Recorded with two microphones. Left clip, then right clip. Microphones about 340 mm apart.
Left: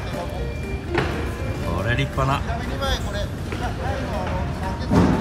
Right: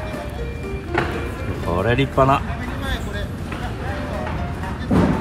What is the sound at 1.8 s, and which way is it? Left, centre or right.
Speech, centre.